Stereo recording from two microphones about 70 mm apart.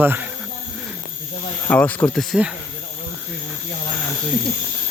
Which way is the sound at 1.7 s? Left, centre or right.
Left.